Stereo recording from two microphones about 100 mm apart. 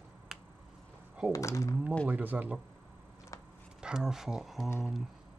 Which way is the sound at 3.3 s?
35° left (ahead or behind).